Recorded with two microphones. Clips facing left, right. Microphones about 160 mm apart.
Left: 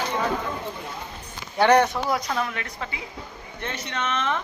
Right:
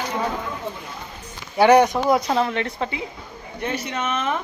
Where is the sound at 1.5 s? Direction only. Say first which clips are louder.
Right 4 dB; 10° right (ahead or behind); by 3.0 s 25° right (ahead or behind).